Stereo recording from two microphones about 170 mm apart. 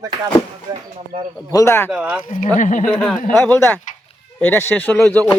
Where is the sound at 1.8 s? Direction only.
10° right (ahead or behind).